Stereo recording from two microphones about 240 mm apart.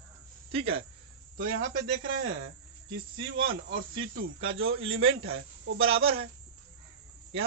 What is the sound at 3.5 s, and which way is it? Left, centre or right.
Speech, right.